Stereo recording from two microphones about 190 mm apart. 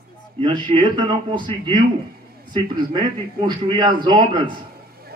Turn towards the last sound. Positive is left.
turn(degrees=-25)  # may be behind; listen again after turning